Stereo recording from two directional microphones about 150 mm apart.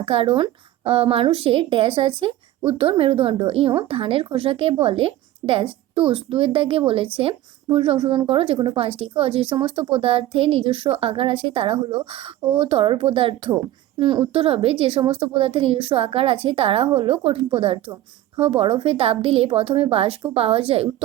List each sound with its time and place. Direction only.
0.0 s a woman's voice: 40° right (ahead or behind)